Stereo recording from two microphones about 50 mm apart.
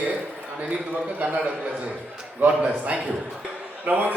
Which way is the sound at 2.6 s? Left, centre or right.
Right.